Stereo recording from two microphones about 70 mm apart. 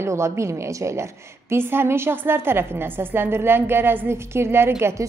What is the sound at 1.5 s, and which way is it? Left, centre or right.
A woman's voice, right.